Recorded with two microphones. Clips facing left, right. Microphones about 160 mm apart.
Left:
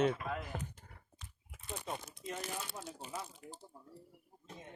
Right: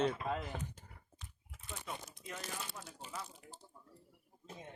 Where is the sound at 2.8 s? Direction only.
25° left (ahead or behind).